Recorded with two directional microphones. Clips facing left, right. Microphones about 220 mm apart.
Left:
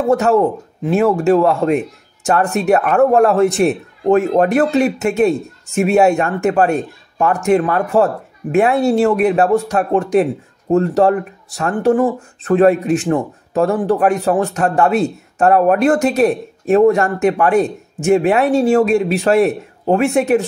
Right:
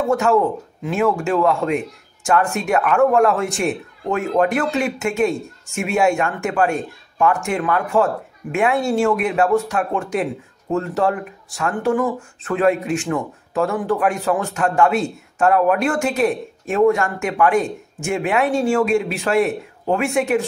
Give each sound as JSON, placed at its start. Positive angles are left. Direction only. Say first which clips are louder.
{"t": 0.0, "sound": "speech", "louder": "left 4 dB", "side_deg": 35}